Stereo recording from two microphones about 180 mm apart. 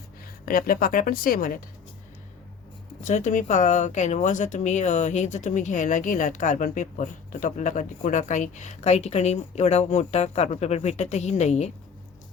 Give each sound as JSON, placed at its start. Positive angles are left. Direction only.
{"t": 0.4, "sound": "a woman's voice", "side_deg": 55}
{"t": 3.0, "sound": "speech", "side_deg": 45}